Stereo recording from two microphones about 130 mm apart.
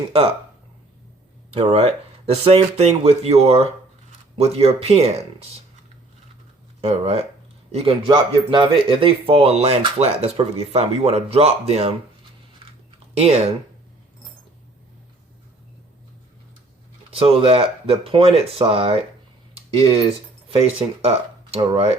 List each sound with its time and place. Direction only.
0.1 s speech: 45° right (ahead or behind)
1.7 s speech: 50° right (ahead or behind)
6.8 s speech: 50° right (ahead or behind)
13.1 s speech: 55° right (ahead or behind)
17.1 s speech: 50° right (ahead or behind)
20.5 s speech: 50° right (ahead or behind)